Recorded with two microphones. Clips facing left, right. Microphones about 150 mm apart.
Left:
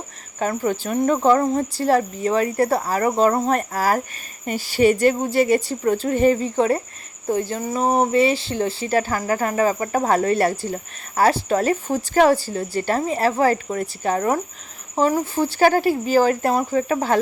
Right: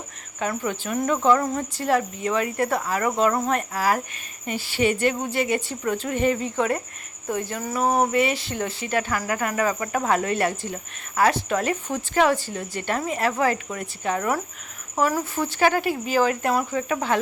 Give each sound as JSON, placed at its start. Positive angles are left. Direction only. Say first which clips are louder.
{"t": 0.3, "sound": "speech", "louder": "left 5 dB", "side_deg": 40}